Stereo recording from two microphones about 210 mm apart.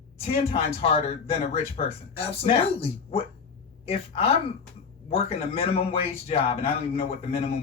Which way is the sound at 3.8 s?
30° left (ahead or behind).